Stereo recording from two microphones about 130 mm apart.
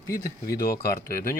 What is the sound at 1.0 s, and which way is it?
Speech, 90° left.